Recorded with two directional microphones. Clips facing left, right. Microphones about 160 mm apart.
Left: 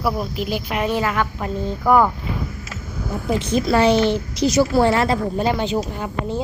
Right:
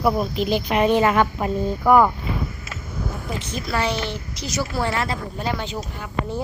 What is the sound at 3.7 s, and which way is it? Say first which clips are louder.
Speech: left 8 dB; 30° left (ahead or behind).